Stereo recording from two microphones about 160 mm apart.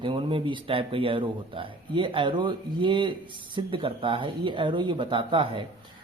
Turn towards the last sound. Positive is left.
turn(degrees=-30)  # may be behind; listen again after turning